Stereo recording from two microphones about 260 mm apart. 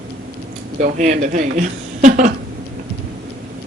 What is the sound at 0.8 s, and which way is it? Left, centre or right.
Speech, right.